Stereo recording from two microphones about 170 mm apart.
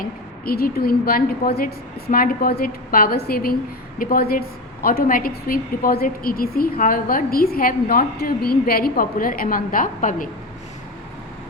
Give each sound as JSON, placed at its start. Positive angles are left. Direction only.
{"t": 0.0, "sound": "a woman's voice", "side_deg": 65}